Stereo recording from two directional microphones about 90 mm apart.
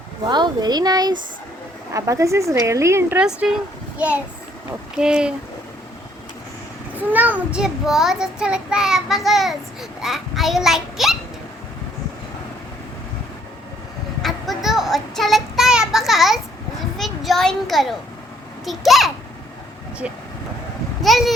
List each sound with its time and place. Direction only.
0.3 s speech: 55° right (ahead or behind)
1.9 s a woman's voice: 35° right (ahead or behind)
3.2 s a woman's voice: 5° right (ahead or behind)
4.9 s child singing: 10° right (ahead or behind)
7.1 s child singing: 20° right (ahead or behind); by 9.6 s centre (ahead or behind)
10.0 s a child's voice: 5° right (ahead or behind)
14.2 s child singing: centre (ahead or behind)
17.0 s a sound: 5° left (ahead or behind)
18.6 s a child's voice: centre (ahead or behind)
21.0 s a child's voice: centre (ahead or behind)